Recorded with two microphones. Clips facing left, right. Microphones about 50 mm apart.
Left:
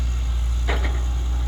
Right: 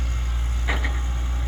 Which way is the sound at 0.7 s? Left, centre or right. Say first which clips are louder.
Even; centre.